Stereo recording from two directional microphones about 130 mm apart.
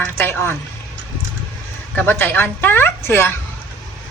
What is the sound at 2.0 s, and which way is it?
A woman's voice, 15° left (ahead or behind).